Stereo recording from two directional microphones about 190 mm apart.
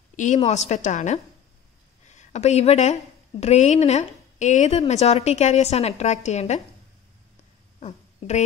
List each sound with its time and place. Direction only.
0.1 s a sound: 40° left (ahead or behind)
0.5 s a woman's voice: 35° left (ahead or behind)
7.8 s fart: 40° left (ahead or behind)